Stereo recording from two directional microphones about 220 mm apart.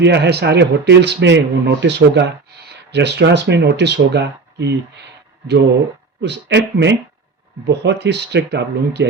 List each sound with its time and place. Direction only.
0.0 s a man's voice: 50° right (ahead or behind)
6.2 s a man's voice: 50° right (ahead or behind)